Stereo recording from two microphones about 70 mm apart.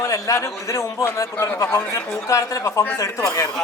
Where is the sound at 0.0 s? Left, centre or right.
Left.